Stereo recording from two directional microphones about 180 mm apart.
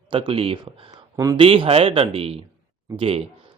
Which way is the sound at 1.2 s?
20° right (ahead or behind).